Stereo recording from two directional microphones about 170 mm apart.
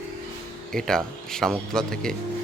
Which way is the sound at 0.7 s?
5° left (ahead or behind).